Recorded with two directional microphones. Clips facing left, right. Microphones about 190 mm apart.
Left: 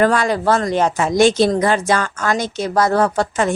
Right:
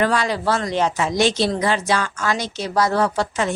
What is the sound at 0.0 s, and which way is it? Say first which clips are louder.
A woman's voice: left 4 dB; 50° left (ahead or behind).